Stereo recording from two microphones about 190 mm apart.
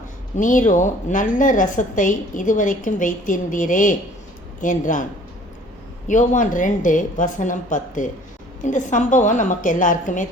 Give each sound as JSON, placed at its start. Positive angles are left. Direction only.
{"t": 0.3, "sound": "a woman's voice", "side_deg": 45}
{"t": 6.1, "sound": "a woman's voice", "side_deg": 40}